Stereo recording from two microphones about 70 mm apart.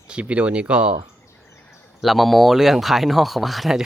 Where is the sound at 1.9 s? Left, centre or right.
Centre.